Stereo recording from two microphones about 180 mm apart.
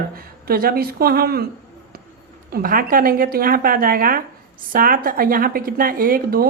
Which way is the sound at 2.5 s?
50° right (ahead or behind).